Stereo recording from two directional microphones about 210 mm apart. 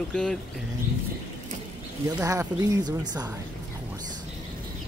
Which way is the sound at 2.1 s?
15° right (ahead or behind).